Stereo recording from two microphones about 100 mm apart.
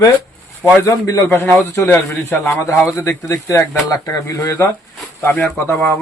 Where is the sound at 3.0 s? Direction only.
30° left (ahead or behind).